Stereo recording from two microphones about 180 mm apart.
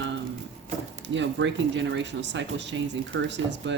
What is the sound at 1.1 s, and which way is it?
Speech, 90° right.